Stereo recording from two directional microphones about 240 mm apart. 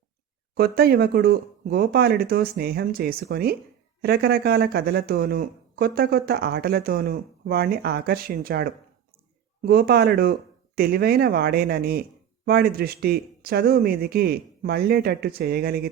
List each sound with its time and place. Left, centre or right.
0.5 s speech: right